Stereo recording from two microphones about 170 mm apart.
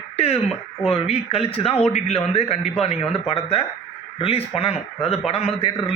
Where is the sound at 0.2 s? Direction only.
35° left (ahead or behind).